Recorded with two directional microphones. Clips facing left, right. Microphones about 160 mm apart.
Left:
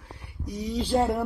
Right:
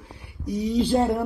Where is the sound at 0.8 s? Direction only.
5° left (ahead or behind).